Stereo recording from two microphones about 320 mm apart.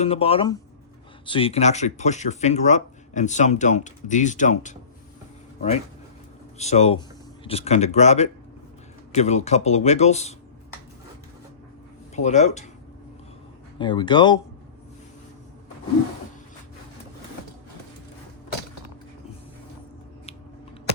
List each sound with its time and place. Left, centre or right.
0.0 s speech: centre
6.6 s speech: left
12.1 s speech: left
13.7 s speech: centre